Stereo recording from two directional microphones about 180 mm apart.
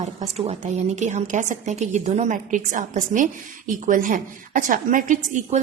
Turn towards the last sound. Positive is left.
turn(degrees=-45)  # may be behind; listen again after turning